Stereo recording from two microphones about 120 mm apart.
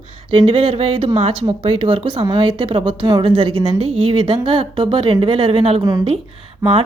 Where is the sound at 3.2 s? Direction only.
55° right (ahead or behind).